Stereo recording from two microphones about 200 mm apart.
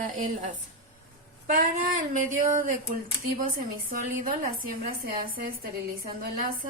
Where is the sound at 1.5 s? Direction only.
40° right (ahead or behind).